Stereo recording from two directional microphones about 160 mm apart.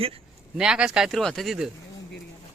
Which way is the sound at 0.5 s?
5° right (ahead or behind).